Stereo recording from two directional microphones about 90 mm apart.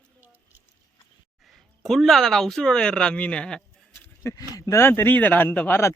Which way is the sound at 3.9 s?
30° left (ahead or behind).